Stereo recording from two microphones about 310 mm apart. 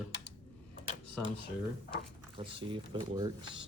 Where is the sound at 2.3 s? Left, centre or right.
Centre.